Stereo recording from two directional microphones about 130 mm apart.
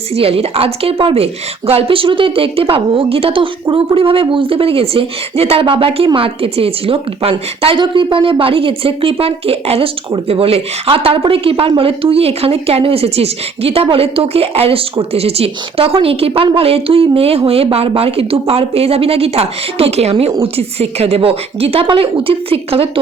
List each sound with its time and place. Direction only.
0.1 s speech: 45° right (ahead or behind)